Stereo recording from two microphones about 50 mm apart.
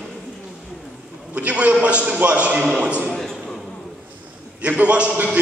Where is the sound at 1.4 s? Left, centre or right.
Right.